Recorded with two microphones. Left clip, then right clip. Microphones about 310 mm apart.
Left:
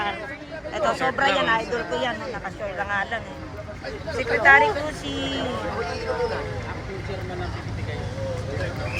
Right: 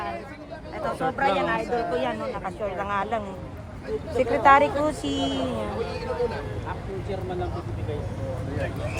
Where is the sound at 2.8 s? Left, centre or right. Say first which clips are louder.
Left 2 dB; centre.